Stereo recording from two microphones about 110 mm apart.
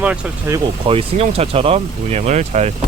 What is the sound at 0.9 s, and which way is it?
Speech, 65° right (ahead or behind).